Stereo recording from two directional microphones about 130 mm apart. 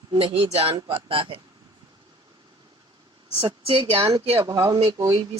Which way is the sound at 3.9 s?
45° right (ahead or behind).